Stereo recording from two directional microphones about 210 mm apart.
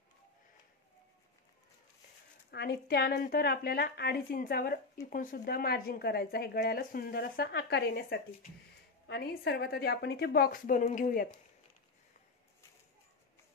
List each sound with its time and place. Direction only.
2.5 s speech: 50° left (ahead or behind)